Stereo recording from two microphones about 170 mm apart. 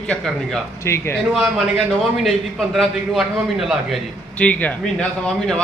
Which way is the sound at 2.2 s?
Centre (ahead or behind).